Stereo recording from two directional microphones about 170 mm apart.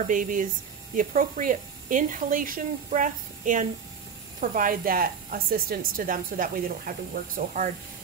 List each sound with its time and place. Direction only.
0.0 s a woman's voice: 50° right (ahead or behind)